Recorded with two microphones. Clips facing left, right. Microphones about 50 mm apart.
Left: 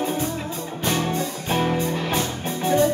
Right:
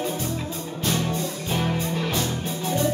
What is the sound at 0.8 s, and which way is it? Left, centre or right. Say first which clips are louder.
Music: left 2 dB; left.